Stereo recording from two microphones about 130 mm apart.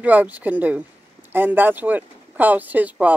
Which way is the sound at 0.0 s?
10° right (ahead or behind).